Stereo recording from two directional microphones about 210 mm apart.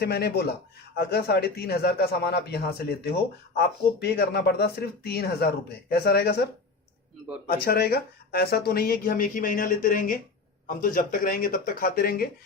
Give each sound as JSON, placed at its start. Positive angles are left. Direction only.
{"t": 0.0, "sound": "speech", "side_deg": 50}
{"t": 7.4, "sound": "speech", "side_deg": 45}